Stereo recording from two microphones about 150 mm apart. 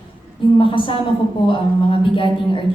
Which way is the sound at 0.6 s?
35° left (ahead or behind).